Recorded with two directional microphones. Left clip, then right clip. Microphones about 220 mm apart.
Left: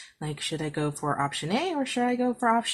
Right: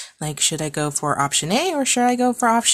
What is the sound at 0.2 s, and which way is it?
Speech, 40° right (ahead or behind).